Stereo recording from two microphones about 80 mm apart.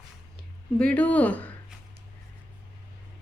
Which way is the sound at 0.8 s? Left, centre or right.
Centre.